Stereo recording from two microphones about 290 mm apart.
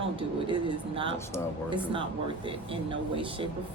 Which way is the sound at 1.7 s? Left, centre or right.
Centre.